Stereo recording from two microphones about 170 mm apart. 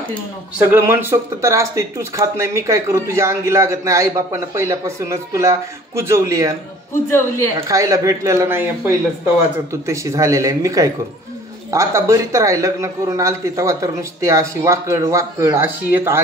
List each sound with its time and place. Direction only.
0.7 s speech: 15° right (ahead or behind)
7.6 s speech: 20° right (ahead or behind)